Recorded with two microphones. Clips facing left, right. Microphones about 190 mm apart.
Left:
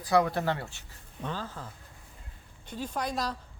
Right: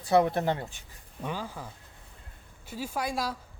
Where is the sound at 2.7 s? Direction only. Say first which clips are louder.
Right 1 dB; 10° right (ahead or behind).